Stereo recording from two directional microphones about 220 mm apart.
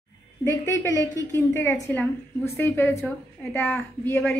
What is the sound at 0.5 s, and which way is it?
A woman's voice, 15° left (ahead or behind).